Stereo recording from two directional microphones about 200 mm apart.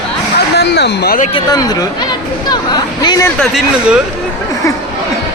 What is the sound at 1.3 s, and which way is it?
Chatter, 20° left (ahead or behind).